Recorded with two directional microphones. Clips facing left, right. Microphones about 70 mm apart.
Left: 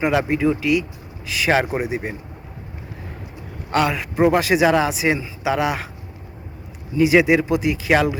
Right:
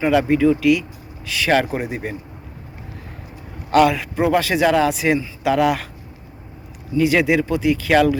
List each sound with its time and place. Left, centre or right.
0.0 s a man's voice: centre
3.8 s a man's voice: centre
7.0 s a man's voice: centre